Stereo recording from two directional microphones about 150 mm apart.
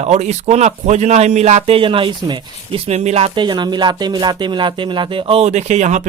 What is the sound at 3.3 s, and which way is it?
Speech, 30° right (ahead or behind).